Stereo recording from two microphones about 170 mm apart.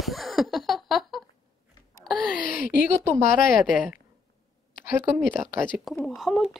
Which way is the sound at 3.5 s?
Centre (ahead or behind).